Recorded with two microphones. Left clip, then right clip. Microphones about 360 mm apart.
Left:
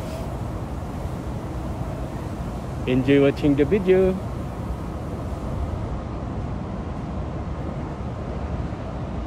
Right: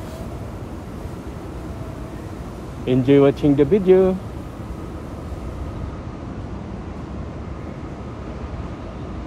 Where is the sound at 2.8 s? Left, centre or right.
Centre.